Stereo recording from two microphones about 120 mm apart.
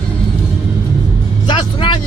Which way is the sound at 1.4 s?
40° left (ahead or behind).